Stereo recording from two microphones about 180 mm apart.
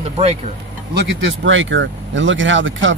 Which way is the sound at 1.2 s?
90° right.